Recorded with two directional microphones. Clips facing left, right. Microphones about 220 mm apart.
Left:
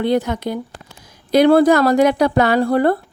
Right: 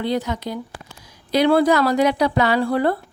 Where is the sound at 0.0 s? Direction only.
55° left (ahead or behind).